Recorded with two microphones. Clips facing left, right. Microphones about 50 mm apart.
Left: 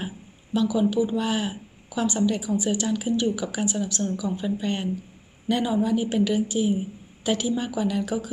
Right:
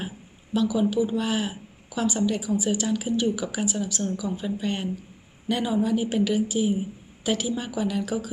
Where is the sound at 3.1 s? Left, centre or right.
Centre.